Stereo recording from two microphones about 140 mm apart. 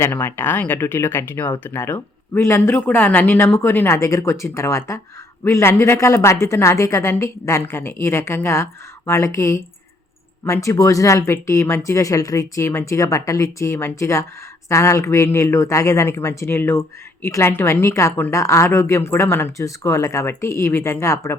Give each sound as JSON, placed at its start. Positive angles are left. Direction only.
{"t": 0.0, "sound": "a woman's voice", "side_deg": 15}